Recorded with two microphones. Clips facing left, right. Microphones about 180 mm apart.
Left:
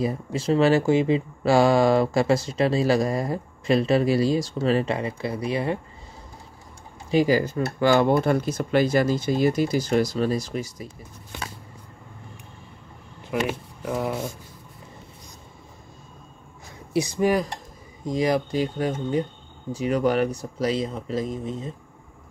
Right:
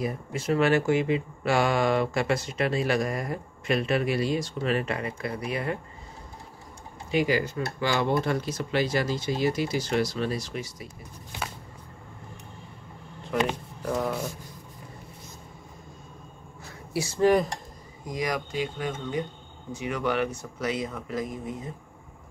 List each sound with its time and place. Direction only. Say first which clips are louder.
0.0 s speech: left 5 dB; 30° left (ahead or behind)
7.1 s speech: left 5 dB; 35° left (ahead or behind)
13.3 s speech: left 1 dB; 5° left (ahead or behind)
16.9 s speech: left 1 dB; 15° left (ahead or behind)
18.0 s speech: left 7 dB; 30° left (ahead or behind)